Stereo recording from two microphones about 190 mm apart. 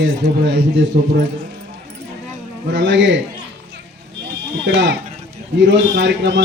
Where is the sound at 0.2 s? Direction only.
50° right (ahead or behind).